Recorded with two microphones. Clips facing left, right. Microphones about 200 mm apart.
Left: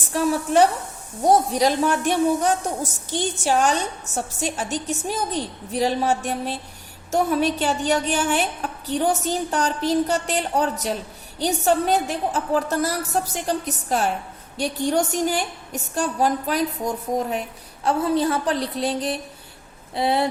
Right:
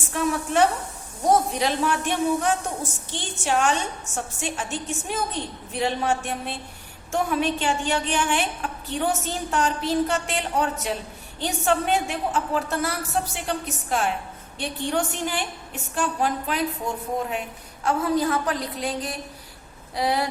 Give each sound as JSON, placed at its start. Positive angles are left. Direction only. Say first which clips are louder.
{"t": 0.1, "sound": "a woman's voice", "louder": "left 4 dB", "side_deg": 35}